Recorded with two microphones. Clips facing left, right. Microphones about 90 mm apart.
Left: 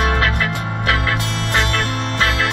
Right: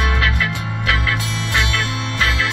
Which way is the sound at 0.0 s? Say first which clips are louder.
Left 2 dB; 40° left (ahead or behind).